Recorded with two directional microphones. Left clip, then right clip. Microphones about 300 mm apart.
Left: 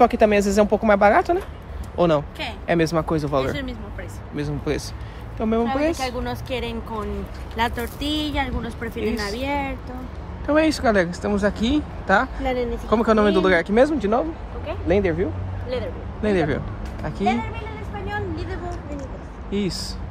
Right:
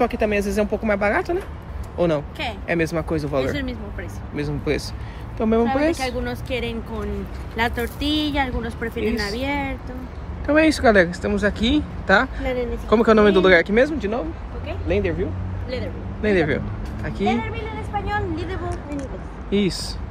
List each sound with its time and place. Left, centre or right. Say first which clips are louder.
0.0 s speech: left 5 dB; centre
12.4 s speech: left 1 dB; left
12.9 s speech: right 3 dB; centre
16.2 s speech: right 2 dB; centre
18.0 s a sound: left 1 dB; centre
19.5 s speech: right 4 dB; centre